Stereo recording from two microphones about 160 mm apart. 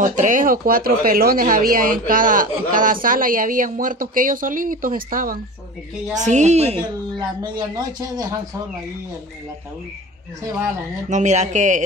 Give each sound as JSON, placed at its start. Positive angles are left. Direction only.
{"t": 0.0, "sound": "speech", "side_deg": -55}
{"t": 6.2, "sound": "a woman's voice", "side_deg": -45}
{"t": 11.1, "sound": "speech", "side_deg": -50}